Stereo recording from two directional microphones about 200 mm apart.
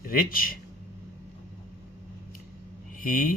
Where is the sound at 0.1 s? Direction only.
45° left (ahead or behind).